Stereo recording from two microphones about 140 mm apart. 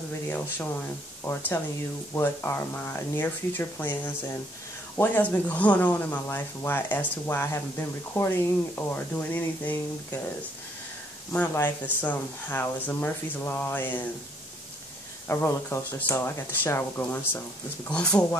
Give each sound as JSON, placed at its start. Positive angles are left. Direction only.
{"t": 1.2, "sound": "speech", "side_deg": 20}
{"t": 11.3, "sound": "speech", "side_deg": 15}
{"t": 15.2, "sound": "speech", "side_deg": 20}